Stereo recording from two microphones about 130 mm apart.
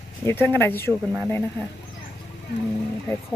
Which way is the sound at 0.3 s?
15° left (ahead or behind).